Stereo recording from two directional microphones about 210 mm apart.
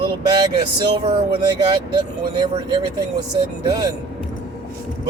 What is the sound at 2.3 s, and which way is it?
Speech, 20° right (ahead or behind).